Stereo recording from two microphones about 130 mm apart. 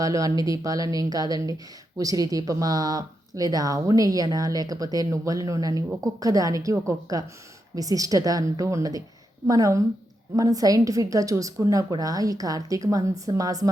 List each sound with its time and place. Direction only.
0.0 s speech: 25° right (ahead or behind)